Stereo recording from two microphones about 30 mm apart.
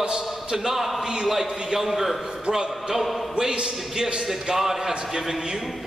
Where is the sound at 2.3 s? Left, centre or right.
Right.